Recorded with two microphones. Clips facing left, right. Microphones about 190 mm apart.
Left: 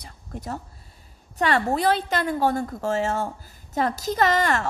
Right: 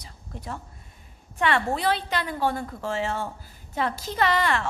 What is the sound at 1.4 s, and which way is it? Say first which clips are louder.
A woman's voice: left 3 dB; 40° left (ahead or behind).